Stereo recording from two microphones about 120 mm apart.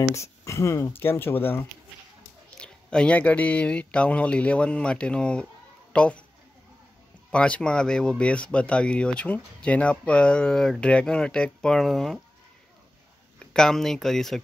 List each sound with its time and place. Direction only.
0.1 s speech: 25° left (ahead or behind)
7.2 s speech: 10° left (ahead or behind)
13.4 s speech: 5° left (ahead or behind)